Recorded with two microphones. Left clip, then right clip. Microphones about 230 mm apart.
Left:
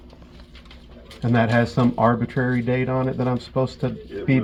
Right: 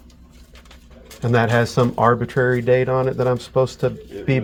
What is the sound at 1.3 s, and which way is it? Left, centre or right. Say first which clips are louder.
Speech: right 3 dB; right.